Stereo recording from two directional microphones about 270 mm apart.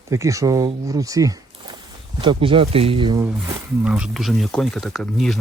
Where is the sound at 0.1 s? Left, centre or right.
Centre.